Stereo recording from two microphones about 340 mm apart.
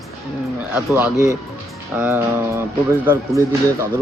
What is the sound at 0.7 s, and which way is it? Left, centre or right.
A man's voice, centre.